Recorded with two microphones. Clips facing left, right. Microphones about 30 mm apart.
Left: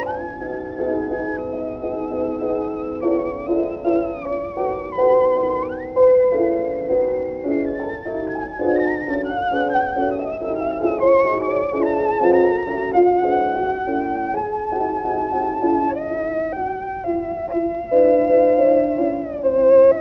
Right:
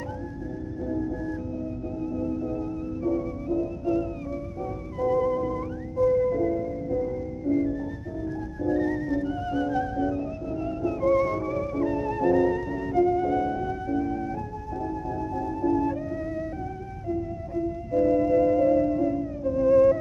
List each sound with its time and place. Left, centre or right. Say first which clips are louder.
2.1 s music: left 8 dB; left
8.6 s music: left 6 dB; left
15.3 s music: left 5 dB; left
17.1 s music: left 7 dB; left